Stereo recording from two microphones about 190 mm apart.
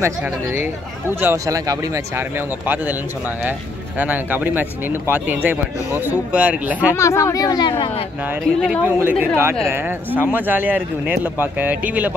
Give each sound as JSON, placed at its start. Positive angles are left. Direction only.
{"t": 0.0, "sound": "speech", "side_deg": -10}
{"t": 4.0, "sound": "speech", "side_deg": -10}
{"t": 6.9, "sound": "speech", "side_deg": 15}
{"t": 8.6, "sound": "speech", "side_deg": -5}